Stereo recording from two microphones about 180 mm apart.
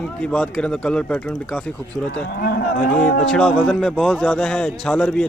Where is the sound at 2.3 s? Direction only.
60° left (ahead or behind).